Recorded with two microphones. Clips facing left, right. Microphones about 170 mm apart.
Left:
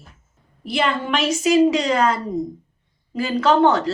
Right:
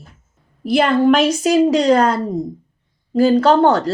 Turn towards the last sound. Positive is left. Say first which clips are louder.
# right 3 dB
turn(degrees=-35)  # may be behind; listen again after turning